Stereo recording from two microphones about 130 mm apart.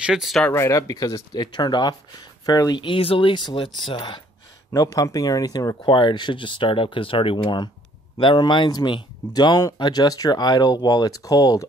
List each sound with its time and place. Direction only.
0.0 s speech: 5° right (ahead or behind)
0.5 s speech: 25° left (ahead or behind); by 4.2 s 40° left (ahead or behind)
4.7 s speech: 25° left (ahead or behind)